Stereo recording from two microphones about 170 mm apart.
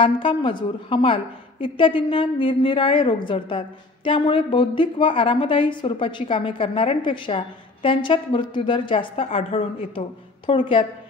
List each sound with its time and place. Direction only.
0.0 s a woman's voice: 30° left (ahead or behind)